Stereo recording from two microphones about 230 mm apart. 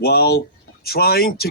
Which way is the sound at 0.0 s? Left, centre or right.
Left.